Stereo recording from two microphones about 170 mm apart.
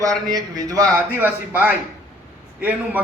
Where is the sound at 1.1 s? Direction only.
10° right (ahead or behind).